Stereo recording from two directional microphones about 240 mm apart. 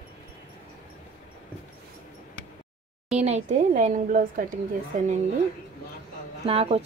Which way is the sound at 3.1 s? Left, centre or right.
Right.